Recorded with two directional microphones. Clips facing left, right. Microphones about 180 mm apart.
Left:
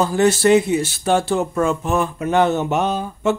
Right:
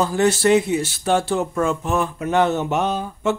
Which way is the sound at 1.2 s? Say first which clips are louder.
Left 2 dB; 30° left (ahead or behind).